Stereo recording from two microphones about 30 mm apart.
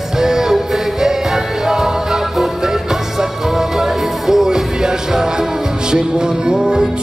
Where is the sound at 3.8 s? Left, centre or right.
Centre.